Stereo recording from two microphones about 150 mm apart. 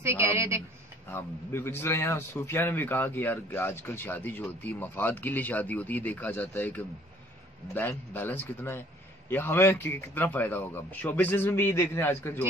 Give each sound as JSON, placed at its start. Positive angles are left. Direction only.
{"t": 0.0, "sound": "a woman's voice", "side_deg": -15}
{"t": 1.1, "sound": "a man's voice", "side_deg": 15}